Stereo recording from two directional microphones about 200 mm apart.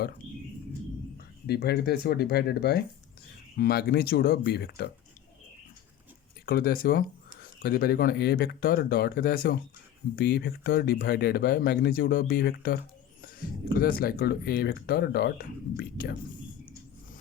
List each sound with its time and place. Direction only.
1.5 s speech: 55° left (ahead or behind)
6.4 s speech: 50° left (ahead or behind)